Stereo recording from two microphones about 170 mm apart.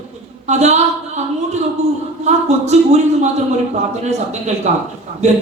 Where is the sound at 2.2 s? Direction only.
40° right (ahead or behind).